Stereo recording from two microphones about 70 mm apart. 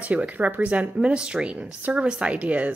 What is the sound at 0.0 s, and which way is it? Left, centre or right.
A woman's voice, right.